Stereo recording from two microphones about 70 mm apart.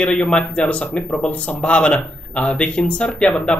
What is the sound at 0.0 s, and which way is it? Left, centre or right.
Speech, centre.